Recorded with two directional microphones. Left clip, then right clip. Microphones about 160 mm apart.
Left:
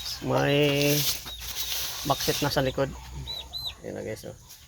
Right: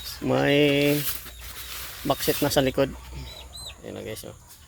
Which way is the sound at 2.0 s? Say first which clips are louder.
Right 3 dB; 60° right (ahead or behind).